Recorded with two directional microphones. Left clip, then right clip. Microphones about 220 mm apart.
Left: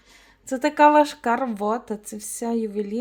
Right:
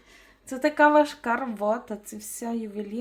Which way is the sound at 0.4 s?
50° left (ahead or behind).